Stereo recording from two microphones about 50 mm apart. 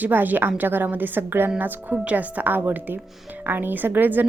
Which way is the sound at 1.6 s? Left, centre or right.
Right.